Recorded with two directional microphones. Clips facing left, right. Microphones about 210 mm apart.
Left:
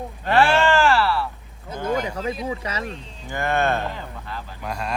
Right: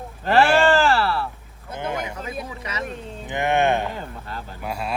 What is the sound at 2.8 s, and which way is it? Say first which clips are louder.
Speech: right 2 dB; 55° right (ahead or behind).